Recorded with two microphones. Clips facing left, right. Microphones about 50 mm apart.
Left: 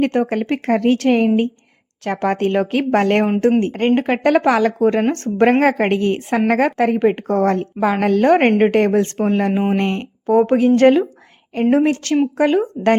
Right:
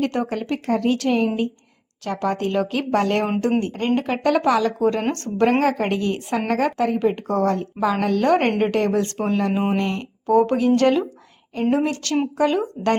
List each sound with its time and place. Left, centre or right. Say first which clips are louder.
0.0 s a woman's voice: left 6 dB; left
5.5 s a woman's voice: left 5 dB; left
10.2 s a woman's voice: left 3 dB; left